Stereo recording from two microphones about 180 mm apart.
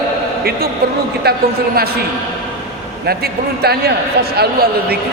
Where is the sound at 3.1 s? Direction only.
60° right (ahead or behind).